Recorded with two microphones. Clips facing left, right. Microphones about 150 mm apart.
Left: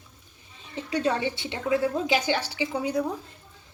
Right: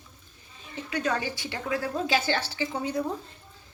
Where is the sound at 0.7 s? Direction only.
30° left (ahead or behind); by 3.0 s 15° left (ahead or behind).